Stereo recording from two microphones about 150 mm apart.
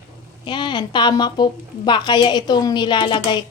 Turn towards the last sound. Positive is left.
turn(degrees=30)  # may be behind; listen again after turning